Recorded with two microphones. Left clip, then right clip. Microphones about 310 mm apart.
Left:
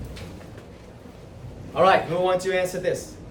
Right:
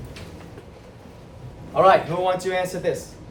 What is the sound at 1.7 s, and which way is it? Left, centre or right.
A man's voice, centre.